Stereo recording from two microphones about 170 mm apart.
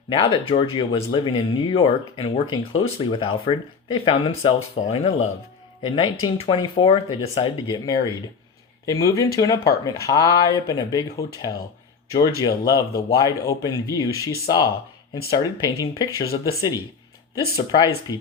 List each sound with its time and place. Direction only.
0.1 s speech: 30° left (ahead or behind)